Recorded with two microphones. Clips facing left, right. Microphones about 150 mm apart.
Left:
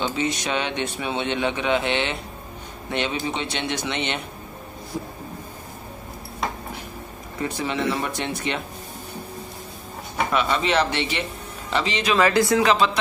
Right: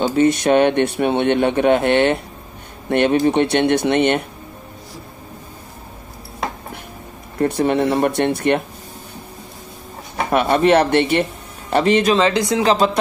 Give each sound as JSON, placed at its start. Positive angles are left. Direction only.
{"t": 0.0, "sound": "a man's voice", "side_deg": -50}
{"t": 7.3, "sound": "speech", "side_deg": -55}
{"t": 10.3, "sound": "a man's voice", "side_deg": -55}
{"t": 12.2, "sound": "speech", "side_deg": -20}
{"t": 12.6, "sound": "a man's voice", "side_deg": -45}